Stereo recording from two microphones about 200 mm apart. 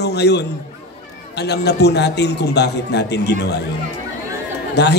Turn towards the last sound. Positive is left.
turn(degrees=55)  # may be behind; listen again after turning